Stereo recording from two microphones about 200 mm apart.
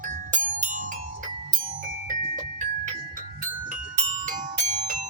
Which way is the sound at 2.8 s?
40° right (ahead or behind).